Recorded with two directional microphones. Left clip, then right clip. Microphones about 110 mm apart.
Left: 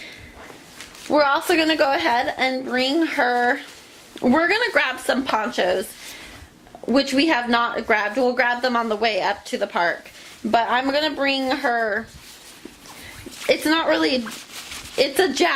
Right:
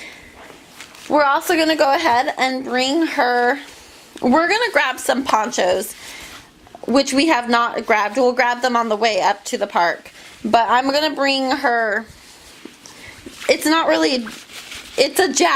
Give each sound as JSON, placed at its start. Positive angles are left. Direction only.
{"t": 1.1, "sound": "a woman's voice", "side_deg": -20}
{"t": 6.8, "sound": "a woman's voice", "side_deg": -35}
{"t": 13.5, "sound": "a woman's voice", "side_deg": -35}
{"t": 14.3, "sound": "a sound", "side_deg": 0}
{"t": 14.9, "sound": "a woman's voice", "side_deg": -30}